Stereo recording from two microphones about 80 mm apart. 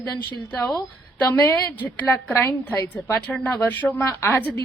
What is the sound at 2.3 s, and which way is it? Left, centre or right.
A woman's voice, left.